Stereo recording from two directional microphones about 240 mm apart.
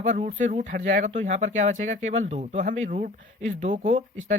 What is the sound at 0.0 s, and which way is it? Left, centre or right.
A man's voice, right.